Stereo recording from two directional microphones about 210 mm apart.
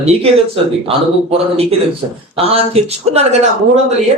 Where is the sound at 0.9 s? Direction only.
30° right (ahead or behind).